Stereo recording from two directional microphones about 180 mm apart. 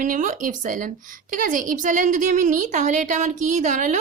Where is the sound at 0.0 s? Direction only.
45° right (ahead or behind).